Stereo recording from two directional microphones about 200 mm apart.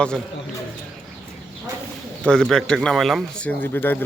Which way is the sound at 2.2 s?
5° left (ahead or behind).